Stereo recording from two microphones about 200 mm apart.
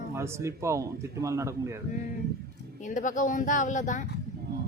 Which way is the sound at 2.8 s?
40° left (ahead or behind).